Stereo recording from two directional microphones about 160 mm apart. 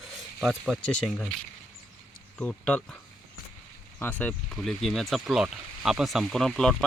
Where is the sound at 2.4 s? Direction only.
5° left (ahead or behind).